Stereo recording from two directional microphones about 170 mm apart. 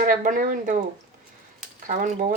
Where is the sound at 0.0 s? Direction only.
50° right (ahead or behind).